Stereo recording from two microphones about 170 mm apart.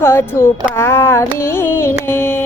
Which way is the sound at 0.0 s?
15° left (ahead or behind).